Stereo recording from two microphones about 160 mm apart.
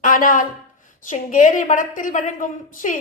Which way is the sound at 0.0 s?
55° left (ahead or behind).